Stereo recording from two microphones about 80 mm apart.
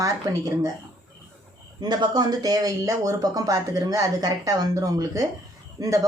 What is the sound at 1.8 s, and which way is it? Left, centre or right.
A woman's voice, right.